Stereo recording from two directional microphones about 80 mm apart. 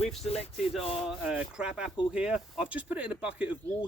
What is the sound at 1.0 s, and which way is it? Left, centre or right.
Speech, centre.